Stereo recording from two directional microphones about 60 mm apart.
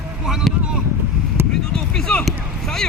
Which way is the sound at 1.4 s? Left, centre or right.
Right.